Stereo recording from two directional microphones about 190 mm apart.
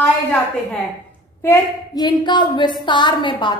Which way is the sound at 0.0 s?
5° left (ahead or behind).